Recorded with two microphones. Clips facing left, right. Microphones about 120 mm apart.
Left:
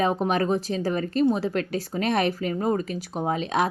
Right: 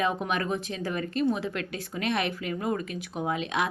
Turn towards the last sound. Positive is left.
turn(degrees=35)  # may be behind; listen again after turning